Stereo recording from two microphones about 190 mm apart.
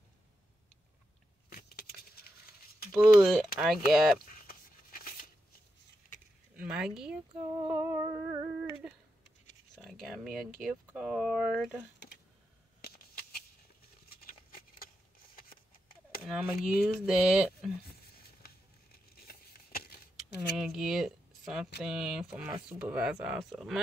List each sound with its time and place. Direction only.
1.5 s keys jangling: 55° left (ahead or behind)
2.9 s speech: centre (ahead or behind)
4.3 s a sound: 50° left (ahead or behind)
6.5 s speech: 5° right (ahead or behind)
7.7 s humming: 10° right (ahead or behind)
8.8 s speech: 5° right (ahead or behind)
12.8 s a sound: 55° left (ahead or behind)
14.1 s patter: 50° left (ahead or behind)
16.3 s speech: 5° right (ahead or behind)
18.1 s patter: 55° left (ahead or behind)
20.5 s speech: centre (ahead or behind)